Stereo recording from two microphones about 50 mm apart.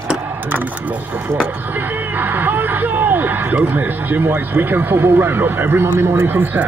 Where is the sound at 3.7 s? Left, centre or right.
Right.